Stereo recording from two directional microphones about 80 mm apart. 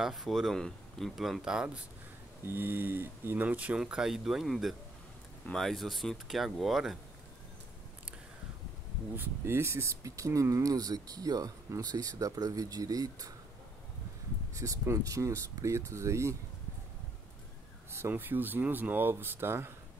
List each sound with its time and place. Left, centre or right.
0.0 s speech: centre
2.4 s speech: right
3.8 s speech: centre
9.1 s speech: right
14.5 s speech: right
17.9 s speech: right